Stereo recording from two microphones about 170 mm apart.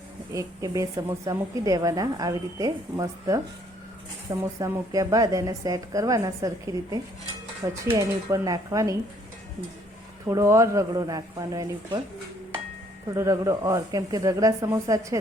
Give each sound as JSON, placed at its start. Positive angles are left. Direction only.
{"t": 0.3, "sound": "a woman's voice", "side_deg": -20}
{"t": 10.2, "sound": "a woman's voice", "side_deg": -15}
{"t": 13.1, "sound": "a woman's voice", "side_deg": -20}